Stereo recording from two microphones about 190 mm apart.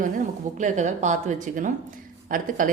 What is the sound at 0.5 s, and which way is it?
A woman's voice, 40° right (ahead or behind).